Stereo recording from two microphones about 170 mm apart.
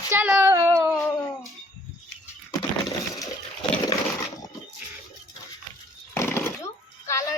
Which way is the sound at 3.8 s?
20° left (ahead or behind).